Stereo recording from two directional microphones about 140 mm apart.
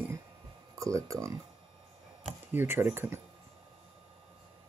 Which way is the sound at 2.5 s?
15° right (ahead or behind).